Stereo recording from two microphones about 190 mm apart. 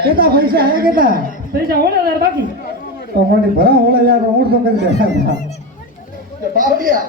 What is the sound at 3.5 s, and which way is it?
Speech, 50° right (ahead or behind).